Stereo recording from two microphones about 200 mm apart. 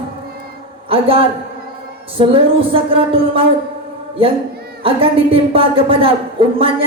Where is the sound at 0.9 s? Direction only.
25° right (ahead or behind).